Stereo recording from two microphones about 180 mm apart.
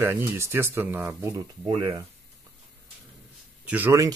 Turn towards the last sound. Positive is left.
turn(degrees=-15)  # may be behind; listen again after turning